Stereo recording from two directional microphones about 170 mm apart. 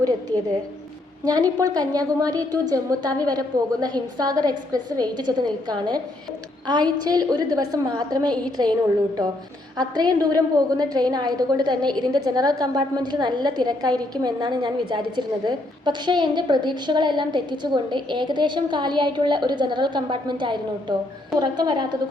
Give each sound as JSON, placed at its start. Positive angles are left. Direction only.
{"t": 1.2, "sound": "a woman's voice", "side_deg": -20}
{"t": 9.7, "sound": "a woman's voice", "side_deg": -25}